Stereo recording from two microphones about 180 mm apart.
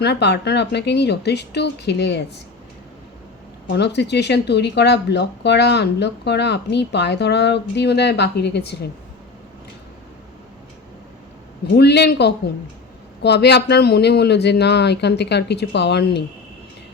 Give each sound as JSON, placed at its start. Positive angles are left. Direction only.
{"t": 0.0, "sound": "speech", "side_deg": 70}
{"t": 3.7, "sound": "speech", "side_deg": 70}
{"t": 11.8, "sound": "speech", "side_deg": 70}